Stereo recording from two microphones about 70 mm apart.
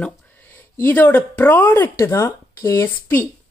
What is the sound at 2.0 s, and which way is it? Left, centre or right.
Speech, left.